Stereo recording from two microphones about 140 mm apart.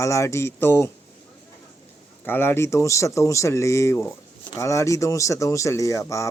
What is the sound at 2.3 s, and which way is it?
Speech, 15° left (ahead or behind).